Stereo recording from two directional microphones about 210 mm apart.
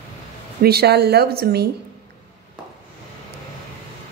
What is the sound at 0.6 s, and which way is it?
Speech, 50° right (ahead or behind).